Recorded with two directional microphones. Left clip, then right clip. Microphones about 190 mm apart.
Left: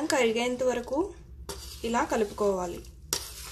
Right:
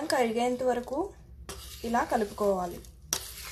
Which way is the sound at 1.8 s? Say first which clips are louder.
Left 1 dB; 5° right (ahead or behind).